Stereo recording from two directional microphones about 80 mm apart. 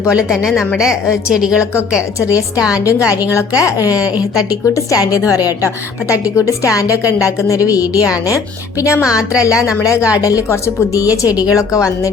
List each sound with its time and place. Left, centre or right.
0.1 s a woman's voice: centre
3.3 s a woman's voice: left
10.1 s a woman's voice: left
11.5 s a woman's voice: left